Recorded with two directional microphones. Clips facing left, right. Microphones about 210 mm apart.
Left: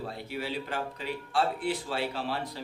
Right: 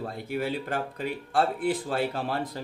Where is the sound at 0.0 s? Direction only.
50° right (ahead or behind).